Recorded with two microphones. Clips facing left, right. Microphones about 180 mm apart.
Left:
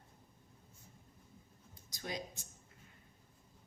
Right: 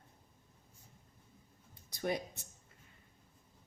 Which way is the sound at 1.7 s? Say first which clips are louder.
Right 7 dB; 60° right (ahead or behind).